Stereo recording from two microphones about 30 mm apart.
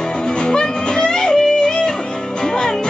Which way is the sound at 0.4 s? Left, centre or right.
Left.